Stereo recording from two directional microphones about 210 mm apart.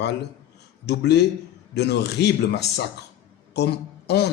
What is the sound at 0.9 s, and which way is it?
A man's voice, 55° left (ahead or behind).